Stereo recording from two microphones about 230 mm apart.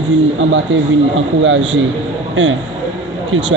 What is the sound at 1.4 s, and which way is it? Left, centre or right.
Speech, right.